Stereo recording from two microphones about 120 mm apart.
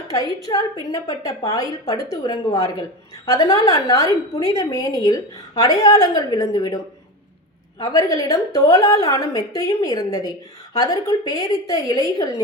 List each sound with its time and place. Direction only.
0.1 s a woman's voice: 25° left (ahead or behind)
7.8 s a woman's voice: 30° left (ahead or behind)